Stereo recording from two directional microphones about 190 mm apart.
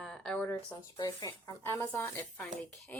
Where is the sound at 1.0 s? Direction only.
20° left (ahead or behind).